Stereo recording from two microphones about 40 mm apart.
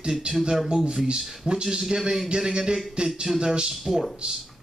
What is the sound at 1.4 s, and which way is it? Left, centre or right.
A man's voice, right.